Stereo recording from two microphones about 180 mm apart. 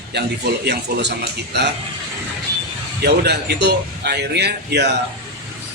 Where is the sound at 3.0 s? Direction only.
65° right (ahead or behind).